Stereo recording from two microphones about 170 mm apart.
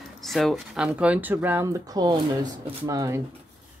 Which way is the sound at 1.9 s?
25° right (ahead or behind).